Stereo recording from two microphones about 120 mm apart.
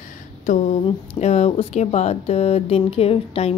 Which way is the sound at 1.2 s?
65° left (ahead or behind).